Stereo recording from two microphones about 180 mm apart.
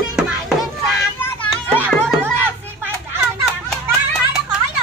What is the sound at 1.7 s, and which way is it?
Music, 10° right (ahead or behind).